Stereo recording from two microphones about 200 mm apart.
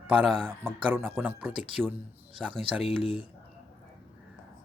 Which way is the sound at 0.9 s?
10° right (ahead or behind).